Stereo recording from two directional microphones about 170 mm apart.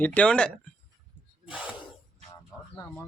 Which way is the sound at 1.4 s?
5° right (ahead or behind).